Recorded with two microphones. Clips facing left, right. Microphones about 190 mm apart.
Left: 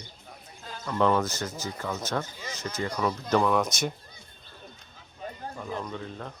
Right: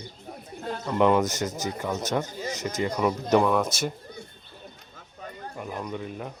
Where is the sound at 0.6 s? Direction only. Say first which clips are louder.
Right 10 dB; 60° right (ahead or behind).